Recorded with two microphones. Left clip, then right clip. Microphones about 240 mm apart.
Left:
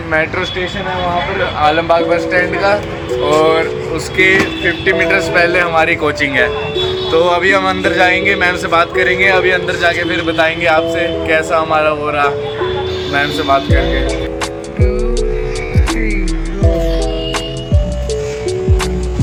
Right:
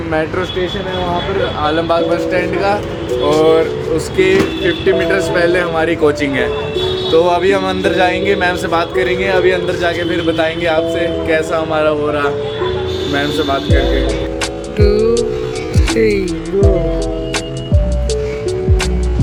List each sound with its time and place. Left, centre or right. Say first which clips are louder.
0.1 s speech: left 3 dB; centre
1.6 s a man's voice: left 4 dB; centre
3.2 s speech: even; centre
3.9 s speech: left 2 dB; centre